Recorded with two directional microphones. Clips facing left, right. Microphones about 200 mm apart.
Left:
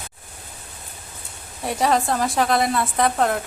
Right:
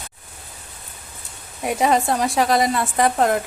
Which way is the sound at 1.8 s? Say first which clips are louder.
Right 1 dB; centre (ahead or behind).